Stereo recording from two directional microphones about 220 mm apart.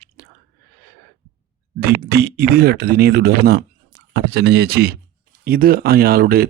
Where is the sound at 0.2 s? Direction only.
45° right (ahead or behind).